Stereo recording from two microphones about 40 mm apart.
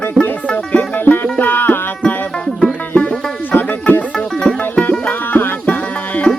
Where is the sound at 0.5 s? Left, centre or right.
Left.